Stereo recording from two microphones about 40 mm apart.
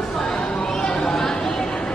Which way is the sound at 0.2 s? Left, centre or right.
Centre.